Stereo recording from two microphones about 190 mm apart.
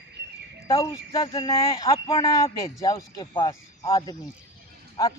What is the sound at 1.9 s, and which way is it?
A man's voice, 15° left (ahead or behind).